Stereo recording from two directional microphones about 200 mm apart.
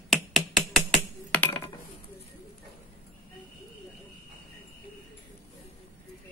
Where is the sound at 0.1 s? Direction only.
Centre (ahead or behind).